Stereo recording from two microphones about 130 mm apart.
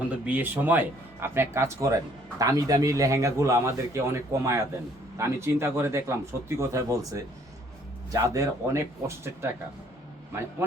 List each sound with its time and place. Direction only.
0.1 s a man's voice: 10° right (ahead or behind)